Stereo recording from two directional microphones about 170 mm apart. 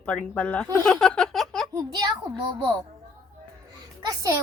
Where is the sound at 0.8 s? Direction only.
5° left (ahead or behind).